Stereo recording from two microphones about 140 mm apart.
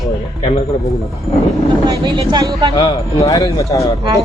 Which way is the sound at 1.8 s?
35° right (ahead or behind).